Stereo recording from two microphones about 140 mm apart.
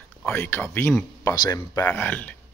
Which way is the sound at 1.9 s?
10° left (ahead or behind).